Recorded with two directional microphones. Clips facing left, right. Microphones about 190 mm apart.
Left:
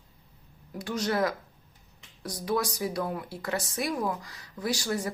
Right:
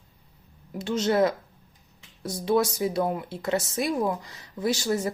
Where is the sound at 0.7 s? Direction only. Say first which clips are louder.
Right 5 dB; 25° right (ahead or behind).